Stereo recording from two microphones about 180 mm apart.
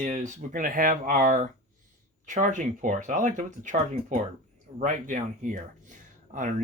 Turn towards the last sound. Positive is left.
turn(degrees=-40)  # may be behind; listen again after turning